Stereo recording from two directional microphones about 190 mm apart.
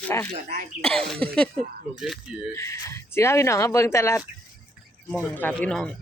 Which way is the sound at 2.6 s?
15° left (ahead or behind).